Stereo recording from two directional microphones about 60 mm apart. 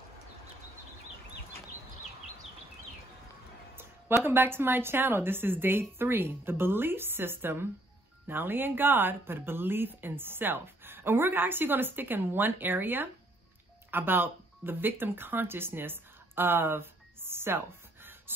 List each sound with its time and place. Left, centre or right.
4.2 s speech: right